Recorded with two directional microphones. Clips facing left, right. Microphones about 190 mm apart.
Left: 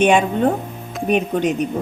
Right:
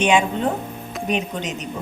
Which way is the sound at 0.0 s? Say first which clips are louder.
Left 4 dB; 55° left (ahead or behind).